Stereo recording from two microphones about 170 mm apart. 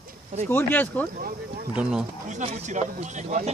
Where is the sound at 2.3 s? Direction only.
40° right (ahead or behind).